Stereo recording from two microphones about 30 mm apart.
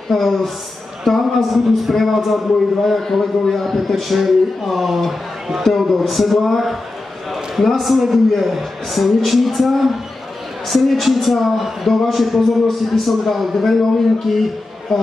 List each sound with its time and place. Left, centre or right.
0.1 s a man's voice: centre
7.2 s a sound: centre
7.8 s a man's voice: centre
14.9 s a man's voice: centre